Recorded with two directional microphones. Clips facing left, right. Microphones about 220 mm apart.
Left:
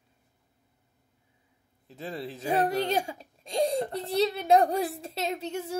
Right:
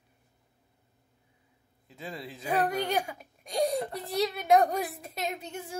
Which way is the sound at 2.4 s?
25° left (ahead or behind).